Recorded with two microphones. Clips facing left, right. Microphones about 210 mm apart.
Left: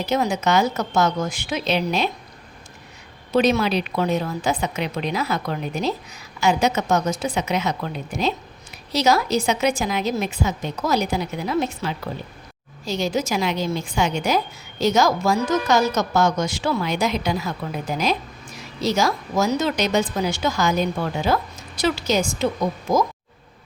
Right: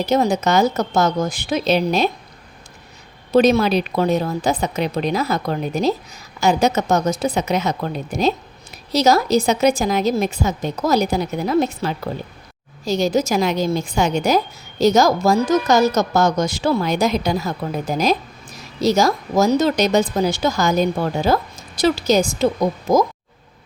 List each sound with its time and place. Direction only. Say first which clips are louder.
0.0 s a woman's voice: right 4 dB; 40° right (ahead or behind)
3.3 s a woman's voice: right 4 dB; 40° right (ahead or behind)